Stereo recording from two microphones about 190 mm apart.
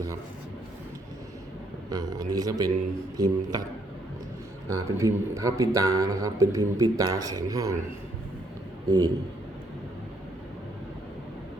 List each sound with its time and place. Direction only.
1.9 s a man's voice: 20° right (ahead or behind)
4.7 s a man's voice: 15° right (ahead or behind)
8.9 s a man's voice: 20° right (ahead or behind)